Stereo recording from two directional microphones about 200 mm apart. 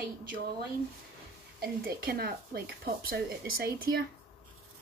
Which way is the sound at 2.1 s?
50° right (ahead or behind).